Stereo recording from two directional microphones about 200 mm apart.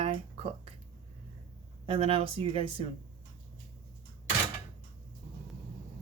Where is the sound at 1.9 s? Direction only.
25° right (ahead or behind).